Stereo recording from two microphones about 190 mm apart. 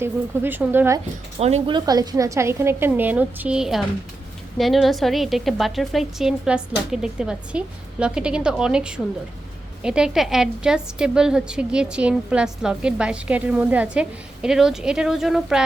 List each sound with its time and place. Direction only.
0.0 s a woman's voice: 10° right (ahead or behind)
1.4 s a woman's voice: 35° right (ahead or behind); by 15.6 s centre (ahead or behind)